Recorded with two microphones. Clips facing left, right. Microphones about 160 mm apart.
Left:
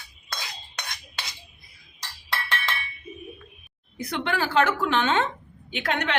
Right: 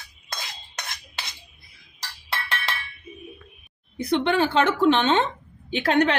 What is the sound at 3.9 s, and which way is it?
A woman's voice, 25° right (ahead or behind).